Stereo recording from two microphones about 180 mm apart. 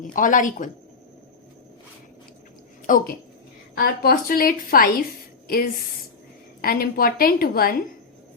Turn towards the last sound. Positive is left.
turn(degrees=55)  # may be behind; listen again after turning